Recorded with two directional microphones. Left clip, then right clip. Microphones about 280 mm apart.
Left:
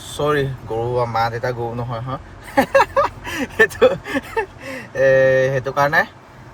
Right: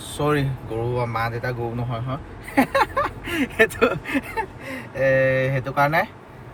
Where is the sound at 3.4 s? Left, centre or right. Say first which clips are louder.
Left 4 dB; centre.